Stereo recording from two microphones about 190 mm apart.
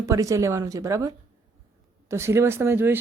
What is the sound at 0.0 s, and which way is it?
A woman's voice, 15° right (ahead or behind).